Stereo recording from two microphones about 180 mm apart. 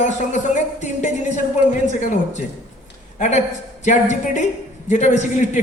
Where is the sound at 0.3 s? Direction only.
40° left (ahead or behind).